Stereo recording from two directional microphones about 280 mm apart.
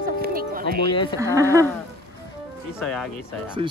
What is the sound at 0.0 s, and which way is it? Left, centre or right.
Livestock, right.